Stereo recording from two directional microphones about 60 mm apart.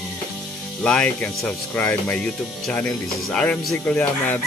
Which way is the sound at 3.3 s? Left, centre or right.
Centre.